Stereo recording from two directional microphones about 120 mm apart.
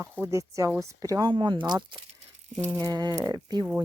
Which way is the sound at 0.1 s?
25° right (ahead or behind).